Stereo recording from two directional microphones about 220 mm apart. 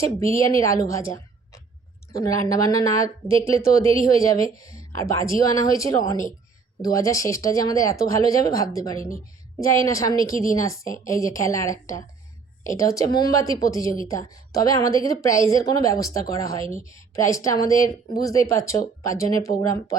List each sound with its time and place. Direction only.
0.0 s speech: 15° left (ahead or behind)
2.1 s speech: 15° left (ahead or behind)
16.6 s a woman's voice: 25° right (ahead or behind)
16.9 s speech: 15° left (ahead or behind)